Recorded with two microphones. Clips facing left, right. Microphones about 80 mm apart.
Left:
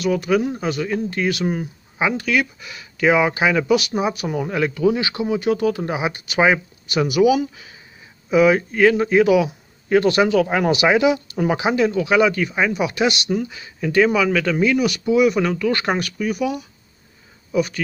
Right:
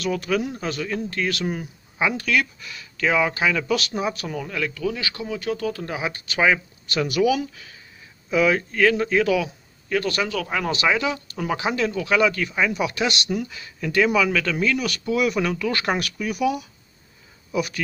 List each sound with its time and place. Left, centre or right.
0.0 s speech: centre
4.4 s speech: left
10.7 s speech: centre